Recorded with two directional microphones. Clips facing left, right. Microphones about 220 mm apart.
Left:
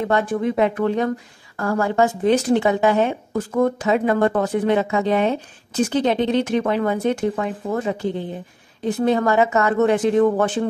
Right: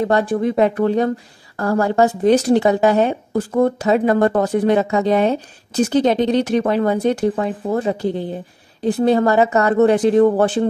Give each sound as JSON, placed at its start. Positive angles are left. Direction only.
{"t": 0.0, "sound": "a woman's voice", "side_deg": -35}